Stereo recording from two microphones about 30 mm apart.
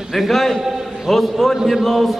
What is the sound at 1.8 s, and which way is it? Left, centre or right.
Speech, centre.